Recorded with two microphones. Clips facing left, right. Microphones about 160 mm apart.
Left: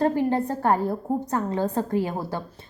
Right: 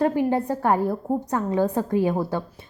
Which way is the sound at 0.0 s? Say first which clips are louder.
Right 1 dB; 15° right (ahead or behind).